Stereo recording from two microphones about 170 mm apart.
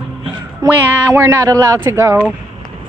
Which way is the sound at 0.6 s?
10° right (ahead or behind).